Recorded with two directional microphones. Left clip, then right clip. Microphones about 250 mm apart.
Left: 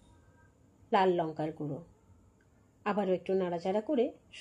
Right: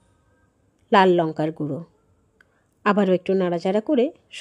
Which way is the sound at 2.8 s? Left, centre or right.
Right.